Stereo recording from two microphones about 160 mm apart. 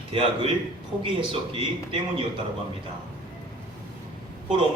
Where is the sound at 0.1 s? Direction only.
35° right (ahead or behind).